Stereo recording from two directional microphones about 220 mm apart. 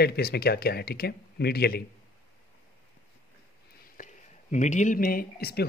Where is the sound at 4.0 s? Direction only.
40° left (ahead or behind).